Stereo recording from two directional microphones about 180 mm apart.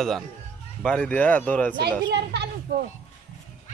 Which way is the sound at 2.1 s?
70° right (ahead or behind).